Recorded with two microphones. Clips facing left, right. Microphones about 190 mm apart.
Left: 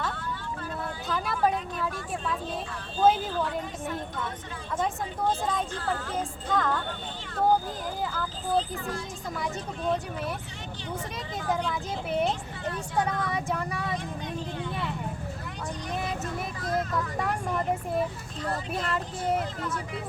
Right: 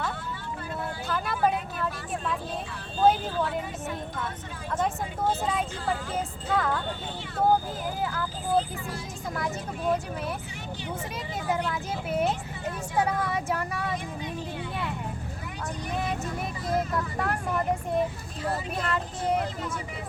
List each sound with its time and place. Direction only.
1.0 s vehicle: 5° right (ahead or behind)
3.0 s speech: centre (ahead or behind)
8.0 s speech: 5° right (ahead or behind)
11.4 s speech: 5° right (ahead or behind)
16.2 s vehicle: 5° right (ahead or behind)
18.4 s speech: 5° right (ahead or behind)